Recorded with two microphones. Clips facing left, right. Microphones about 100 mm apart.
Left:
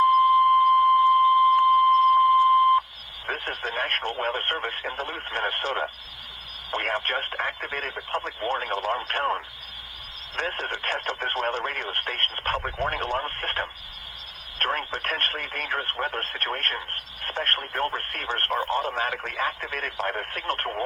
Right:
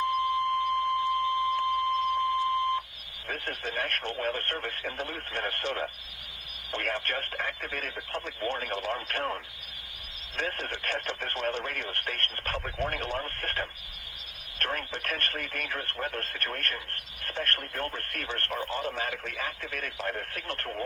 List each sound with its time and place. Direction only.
0.1 s alarm clock: 45° left (ahead or behind)
3.2 s speech: 45° left (ahead or behind)